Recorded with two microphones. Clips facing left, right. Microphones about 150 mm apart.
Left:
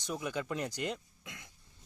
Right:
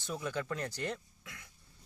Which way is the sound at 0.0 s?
15° left (ahead or behind).